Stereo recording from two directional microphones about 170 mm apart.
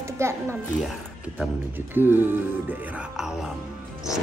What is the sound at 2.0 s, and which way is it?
A woman's voice, 10° right (ahead or behind).